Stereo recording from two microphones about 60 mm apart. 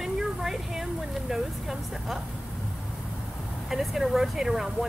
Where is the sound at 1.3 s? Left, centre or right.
Centre.